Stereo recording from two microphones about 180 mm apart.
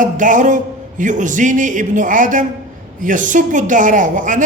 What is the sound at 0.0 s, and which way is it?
A woman's voice, 45° right (ahead or behind).